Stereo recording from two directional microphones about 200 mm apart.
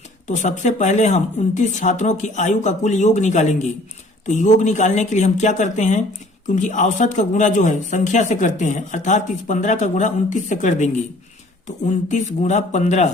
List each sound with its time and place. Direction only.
0.3 s speech: 35° left (ahead or behind)